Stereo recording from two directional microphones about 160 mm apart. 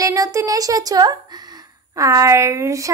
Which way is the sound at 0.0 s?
20° right (ahead or behind).